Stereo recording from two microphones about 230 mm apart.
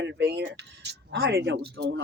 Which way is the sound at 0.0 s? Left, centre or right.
Right.